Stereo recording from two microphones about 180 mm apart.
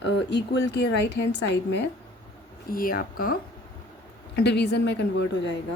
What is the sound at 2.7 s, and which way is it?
Speech, 50° left (ahead or behind).